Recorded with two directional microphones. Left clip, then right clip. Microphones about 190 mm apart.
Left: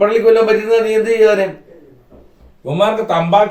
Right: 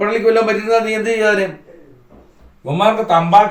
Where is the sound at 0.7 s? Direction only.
Centre (ahead or behind).